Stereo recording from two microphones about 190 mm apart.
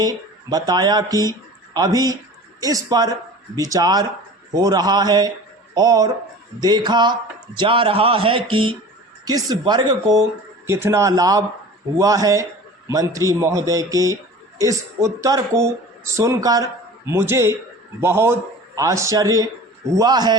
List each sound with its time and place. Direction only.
0.0 s a man's voice: 20° right (ahead or behind)